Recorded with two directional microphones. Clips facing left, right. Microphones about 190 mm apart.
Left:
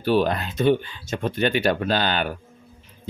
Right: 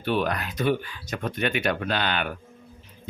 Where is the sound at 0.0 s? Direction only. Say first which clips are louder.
Left 5 dB; 30° left (ahead or behind).